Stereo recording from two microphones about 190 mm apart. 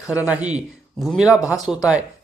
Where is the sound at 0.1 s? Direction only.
5° right (ahead or behind).